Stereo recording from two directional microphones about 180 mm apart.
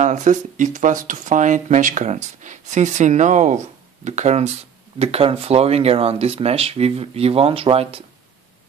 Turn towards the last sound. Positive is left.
turn(degrees=-30)  # may be behind; listen again after turning